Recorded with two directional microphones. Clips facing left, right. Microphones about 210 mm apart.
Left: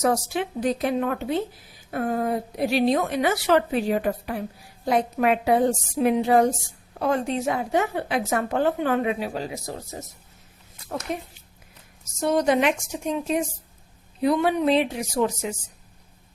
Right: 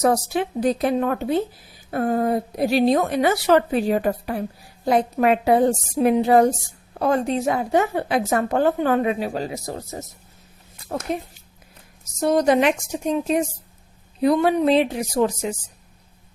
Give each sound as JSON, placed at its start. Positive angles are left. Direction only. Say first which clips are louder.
{"t": 0.0, "sound": "a woman's voice", "louder": "right 3 dB", "side_deg": -35}
{"t": 12.2, "sound": "a woman's voice", "louder": "right 3 dB", "side_deg": -40}